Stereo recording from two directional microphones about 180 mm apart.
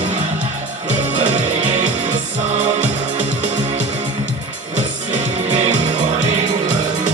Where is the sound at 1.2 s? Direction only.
40° right (ahead or behind).